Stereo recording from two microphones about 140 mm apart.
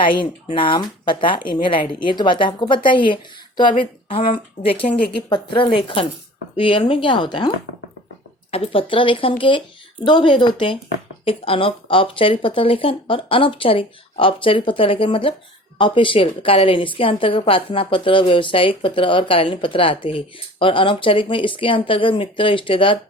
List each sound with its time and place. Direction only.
0.0 s a woman's voice: 35° left (ahead or behind)